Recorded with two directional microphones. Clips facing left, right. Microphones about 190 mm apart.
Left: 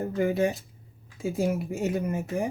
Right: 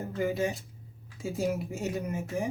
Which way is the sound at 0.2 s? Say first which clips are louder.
Left 4 dB; 55° left (ahead or behind).